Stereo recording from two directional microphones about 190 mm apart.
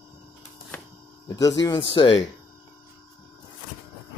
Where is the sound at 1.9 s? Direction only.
30° left (ahead or behind).